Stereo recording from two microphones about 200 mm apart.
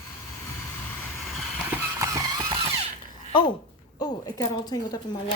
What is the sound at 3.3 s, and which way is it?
Speech, 25° left (ahead or behind).